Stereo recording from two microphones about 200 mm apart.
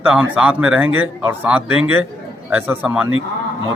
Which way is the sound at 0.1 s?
5° right (ahead or behind).